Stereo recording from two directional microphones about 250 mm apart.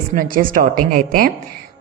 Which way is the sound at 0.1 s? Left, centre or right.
Right.